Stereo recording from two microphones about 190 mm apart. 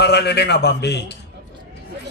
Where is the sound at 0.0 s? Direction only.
60° left (ahead or behind).